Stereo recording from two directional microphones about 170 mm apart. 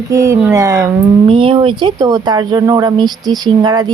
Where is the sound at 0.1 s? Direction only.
20° right (ahead or behind).